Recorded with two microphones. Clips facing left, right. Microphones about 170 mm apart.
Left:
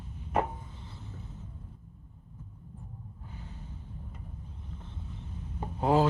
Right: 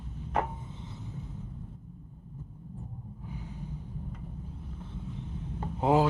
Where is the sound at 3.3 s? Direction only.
10° right (ahead or behind).